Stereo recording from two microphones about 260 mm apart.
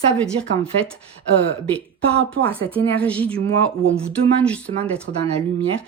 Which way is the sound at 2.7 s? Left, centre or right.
Centre.